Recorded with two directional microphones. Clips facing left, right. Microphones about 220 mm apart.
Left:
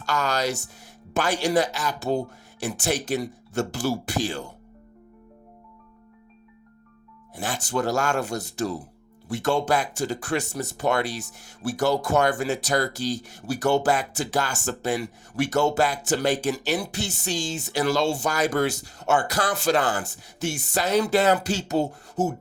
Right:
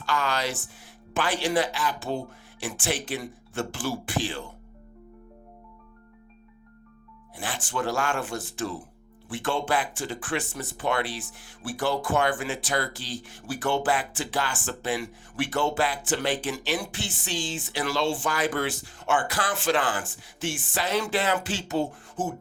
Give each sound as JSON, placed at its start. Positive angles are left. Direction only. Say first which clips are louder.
{"t": 0.0, "sound": "speech", "louder": "left 3 dB", "side_deg": 40}
{"t": 7.3, "sound": "speech", "louder": "left 4 dB", "side_deg": 40}